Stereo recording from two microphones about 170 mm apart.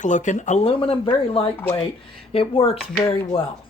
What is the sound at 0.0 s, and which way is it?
Speech, 45° left (ahead or behind).